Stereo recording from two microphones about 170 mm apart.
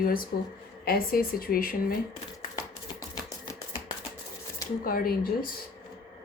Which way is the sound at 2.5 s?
20° left (ahead or behind).